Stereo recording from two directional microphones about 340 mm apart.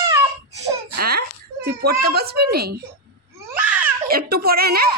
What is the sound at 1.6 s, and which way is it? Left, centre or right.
A child's voice, right.